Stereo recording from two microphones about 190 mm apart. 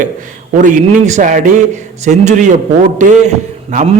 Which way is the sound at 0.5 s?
40° right (ahead or behind).